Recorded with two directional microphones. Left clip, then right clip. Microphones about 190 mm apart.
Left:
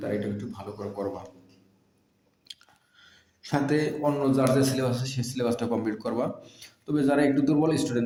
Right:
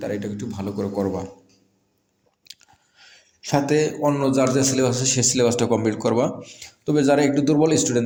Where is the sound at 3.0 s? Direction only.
30° right (ahead or behind).